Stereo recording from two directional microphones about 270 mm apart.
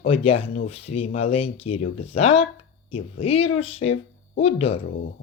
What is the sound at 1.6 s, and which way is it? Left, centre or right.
Speech, left.